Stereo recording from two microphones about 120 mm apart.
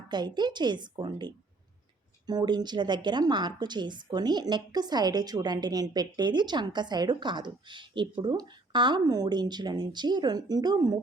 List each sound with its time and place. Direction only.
0.1 s a woman's voice: 40° right (ahead or behind)